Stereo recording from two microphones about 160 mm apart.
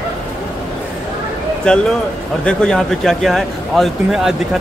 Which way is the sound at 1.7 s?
5° left (ahead or behind).